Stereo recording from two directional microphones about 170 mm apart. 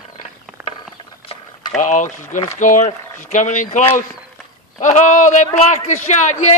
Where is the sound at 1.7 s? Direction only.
50° left (ahead or behind).